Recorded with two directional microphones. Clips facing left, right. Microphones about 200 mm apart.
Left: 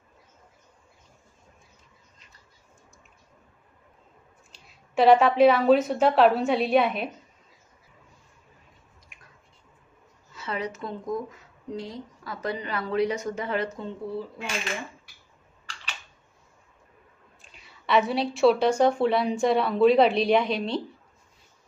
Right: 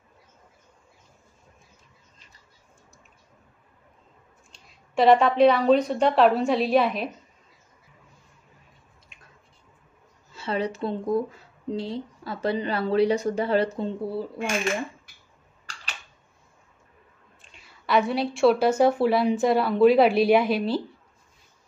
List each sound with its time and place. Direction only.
4.5 s a woman's voice: centre (ahead or behind)
10.3 s speech: 30° right (ahead or behind)
17.4 s a woman's voice: centre (ahead or behind)